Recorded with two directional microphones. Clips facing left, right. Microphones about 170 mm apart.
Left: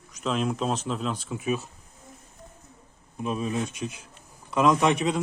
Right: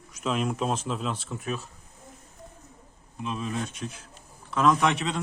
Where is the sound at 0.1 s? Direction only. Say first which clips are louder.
Left 1 dB; 5° right (ahead or behind).